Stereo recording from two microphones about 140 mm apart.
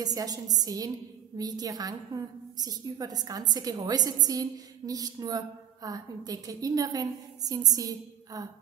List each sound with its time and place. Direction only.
0.0 s a woman's voice: 25° right (ahead or behind)